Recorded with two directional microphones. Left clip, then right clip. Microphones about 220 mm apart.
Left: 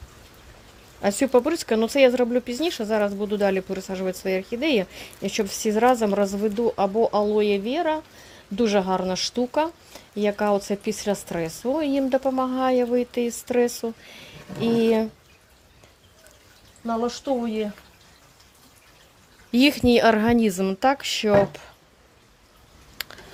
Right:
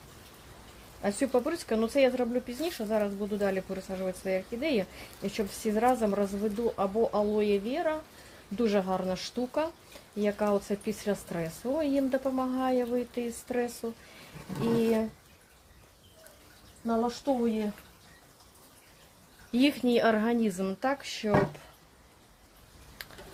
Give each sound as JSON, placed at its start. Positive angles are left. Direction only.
{"t": 1.0, "sound": "speech", "side_deg": 50}
{"t": 14.8, "sound": "speech", "side_deg": 50}
{"t": 19.5, "sound": "speech", "side_deg": 45}
{"t": 23.0, "sound": "a sound", "side_deg": 45}